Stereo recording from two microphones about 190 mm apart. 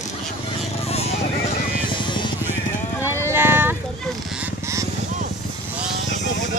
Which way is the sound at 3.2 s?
10° right (ahead or behind).